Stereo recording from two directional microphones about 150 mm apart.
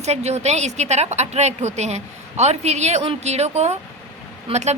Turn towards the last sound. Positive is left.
turn(degrees=-50)  # may be behind; listen again after turning